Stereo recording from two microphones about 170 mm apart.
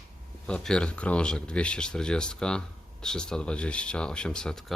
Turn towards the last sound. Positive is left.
turn(degrees=5)  # may be behind; listen again after turning